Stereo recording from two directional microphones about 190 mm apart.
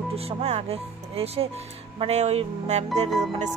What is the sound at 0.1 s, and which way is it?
Speech, 30° right (ahead or behind).